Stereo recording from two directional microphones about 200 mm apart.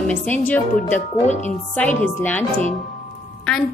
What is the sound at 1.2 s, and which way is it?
Speech, 35° left (ahead or behind).